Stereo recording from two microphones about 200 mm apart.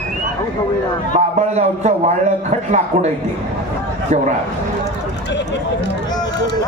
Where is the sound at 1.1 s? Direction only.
35° right (ahead or behind).